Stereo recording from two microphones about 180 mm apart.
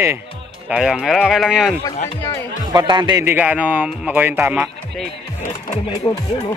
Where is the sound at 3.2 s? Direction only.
10° right (ahead or behind).